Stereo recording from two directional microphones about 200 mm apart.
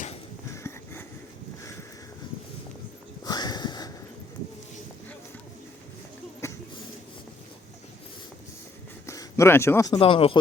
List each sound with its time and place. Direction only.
0.5 s sniff: 15° left (ahead or behind)
3.2 s sniff: 20° left (ahead or behind)
6.4 s a sound: 15° left (ahead or behind)
9.0 s speech: 15° left (ahead or behind)